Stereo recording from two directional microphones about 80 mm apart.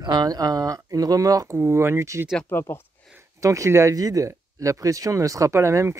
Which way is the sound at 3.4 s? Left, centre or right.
Right.